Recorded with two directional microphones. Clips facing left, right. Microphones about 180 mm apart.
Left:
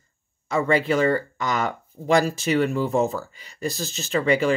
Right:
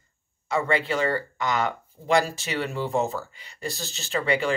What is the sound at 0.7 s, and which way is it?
Speech, 40° left (ahead or behind).